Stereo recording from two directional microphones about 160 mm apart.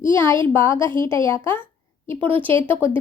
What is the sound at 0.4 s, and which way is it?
Speech, 15° left (ahead or behind).